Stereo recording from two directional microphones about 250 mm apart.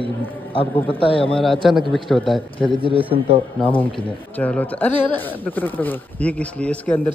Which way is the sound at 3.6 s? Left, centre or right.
Left.